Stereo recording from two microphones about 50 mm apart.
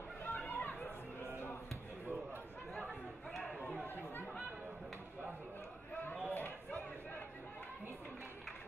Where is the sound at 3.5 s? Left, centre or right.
Left.